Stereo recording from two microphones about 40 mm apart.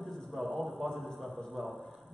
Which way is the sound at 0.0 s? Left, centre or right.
Centre.